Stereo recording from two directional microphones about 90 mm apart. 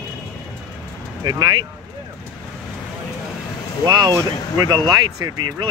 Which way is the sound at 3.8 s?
55° right (ahead or behind).